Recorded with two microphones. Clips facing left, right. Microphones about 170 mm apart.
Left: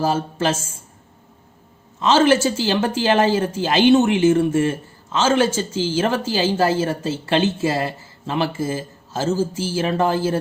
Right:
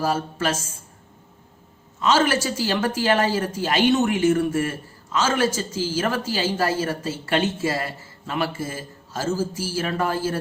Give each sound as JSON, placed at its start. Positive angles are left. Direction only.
{"t": 0.0, "sound": "speech", "side_deg": 25}
{"t": 2.0, "sound": "speech", "side_deg": 25}